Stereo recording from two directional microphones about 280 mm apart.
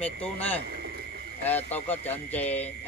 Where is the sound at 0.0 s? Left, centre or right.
Centre.